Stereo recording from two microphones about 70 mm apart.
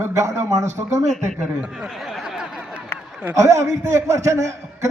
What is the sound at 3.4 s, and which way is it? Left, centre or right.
A man's voice, right.